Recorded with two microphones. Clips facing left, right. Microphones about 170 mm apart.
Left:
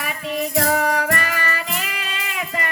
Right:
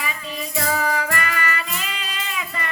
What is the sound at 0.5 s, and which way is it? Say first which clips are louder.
Music: left 2 dB; 65° left (ahead or behind).